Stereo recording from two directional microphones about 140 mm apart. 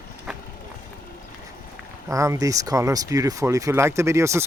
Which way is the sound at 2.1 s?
25° right (ahead or behind).